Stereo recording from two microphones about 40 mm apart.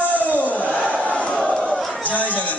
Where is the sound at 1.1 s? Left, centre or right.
Left.